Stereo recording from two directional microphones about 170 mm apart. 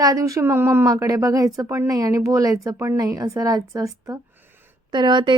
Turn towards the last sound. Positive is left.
turn(degrees=-25)  # may be behind; listen again after turning